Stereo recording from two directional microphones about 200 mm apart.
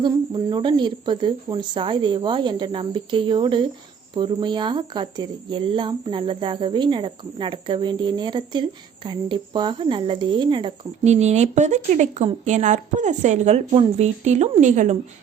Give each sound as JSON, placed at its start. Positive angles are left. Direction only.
{"t": 0.5, "sound": "speech", "side_deg": -25}